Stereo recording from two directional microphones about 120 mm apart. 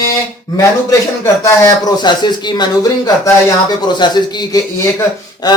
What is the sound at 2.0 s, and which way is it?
Speech, 40° left (ahead or behind).